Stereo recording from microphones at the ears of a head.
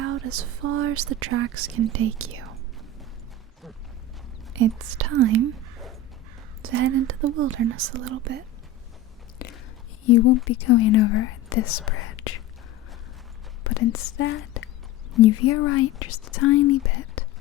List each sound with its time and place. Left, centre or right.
0.0 s speech: right
4.5 s speech: right
10.0 s speech: left
13.7 s speech: left